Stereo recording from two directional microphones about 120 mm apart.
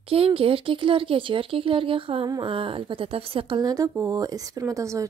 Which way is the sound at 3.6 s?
30° right (ahead or behind).